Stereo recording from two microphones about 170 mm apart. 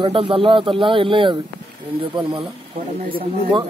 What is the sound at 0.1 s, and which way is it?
Speech, 30° right (ahead or behind).